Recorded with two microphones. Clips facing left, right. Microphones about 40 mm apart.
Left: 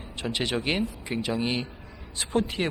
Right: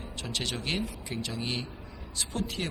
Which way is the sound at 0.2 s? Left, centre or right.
Left.